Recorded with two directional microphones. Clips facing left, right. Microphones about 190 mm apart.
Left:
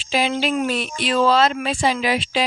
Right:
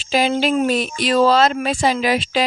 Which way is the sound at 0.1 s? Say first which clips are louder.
Right 3 dB; 40° right (ahead or behind).